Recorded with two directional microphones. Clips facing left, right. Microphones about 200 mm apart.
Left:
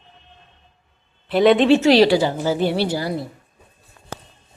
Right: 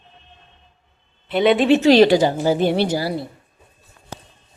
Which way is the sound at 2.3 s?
15° right (ahead or behind).